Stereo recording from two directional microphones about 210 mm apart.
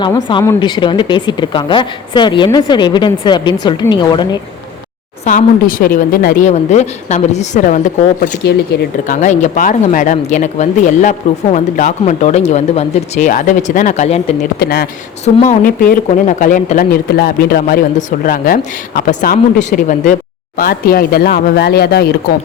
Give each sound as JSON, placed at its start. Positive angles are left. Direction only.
{"t": 0.3, "sound": "a woman's voice", "side_deg": 20}
{"t": 5.2, "sound": "a woman's voice", "side_deg": 40}
{"t": 8.7, "sound": "speech", "side_deg": 50}
{"t": 9.0, "sound": "a woman's voice", "side_deg": 35}
{"t": 14.6, "sound": "speech", "side_deg": 50}
{"t": 15.2, "sound": "a woman's voice", "side_deg": 35}